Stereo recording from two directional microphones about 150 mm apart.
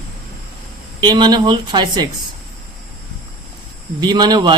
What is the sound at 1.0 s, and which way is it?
Speech, 30° right (ahead or behind).